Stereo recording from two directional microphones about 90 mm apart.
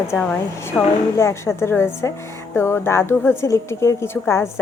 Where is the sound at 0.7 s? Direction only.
10° left (ahead or behind).